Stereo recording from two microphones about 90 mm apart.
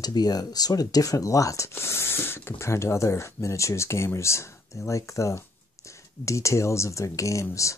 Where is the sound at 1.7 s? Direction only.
25° left (ahead or behind).